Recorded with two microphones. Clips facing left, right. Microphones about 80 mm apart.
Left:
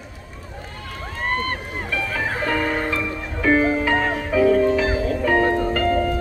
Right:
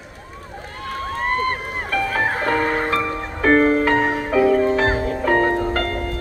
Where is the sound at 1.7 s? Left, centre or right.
Right.